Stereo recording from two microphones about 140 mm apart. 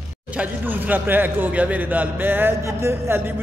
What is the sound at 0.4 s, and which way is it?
A man's voice, 10° right (ahead or behind).